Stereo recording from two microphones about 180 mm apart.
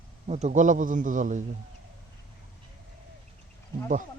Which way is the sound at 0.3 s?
40° right (ahead or behind).